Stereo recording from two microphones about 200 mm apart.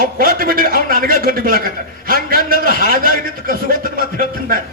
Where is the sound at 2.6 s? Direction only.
45° right (ahead or behind).